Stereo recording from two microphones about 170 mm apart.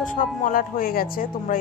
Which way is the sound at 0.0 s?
50° left (ahead or behind).